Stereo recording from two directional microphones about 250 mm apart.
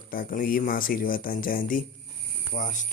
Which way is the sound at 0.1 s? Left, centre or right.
Left.